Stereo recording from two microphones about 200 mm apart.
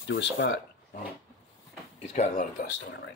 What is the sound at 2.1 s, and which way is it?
Speech, 40° left (ahead or behind).